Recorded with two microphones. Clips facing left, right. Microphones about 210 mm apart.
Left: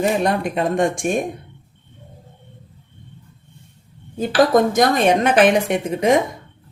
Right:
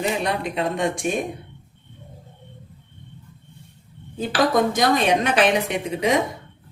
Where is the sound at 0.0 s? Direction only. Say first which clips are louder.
Left 5 dB; 50° left (ahead or behind).